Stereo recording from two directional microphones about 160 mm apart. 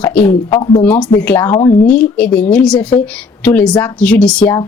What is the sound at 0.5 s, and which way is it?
Speech, 25° left (ahead or behind).